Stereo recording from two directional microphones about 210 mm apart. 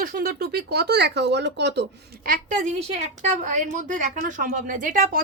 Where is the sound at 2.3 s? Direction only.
35° right (ahead or behind).